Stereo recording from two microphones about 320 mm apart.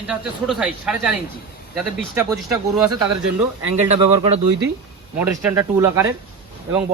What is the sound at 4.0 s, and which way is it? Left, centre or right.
Speech, centre.